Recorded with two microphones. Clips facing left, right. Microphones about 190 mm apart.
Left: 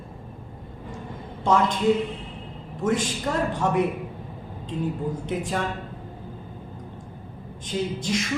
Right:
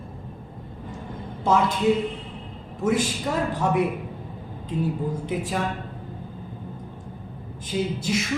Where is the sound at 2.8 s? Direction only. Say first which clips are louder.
Right 1 dB; 5° right (ahead or behind).